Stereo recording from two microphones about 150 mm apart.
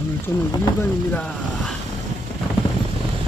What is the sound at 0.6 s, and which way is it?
Speech, 15° left (ahead or behind).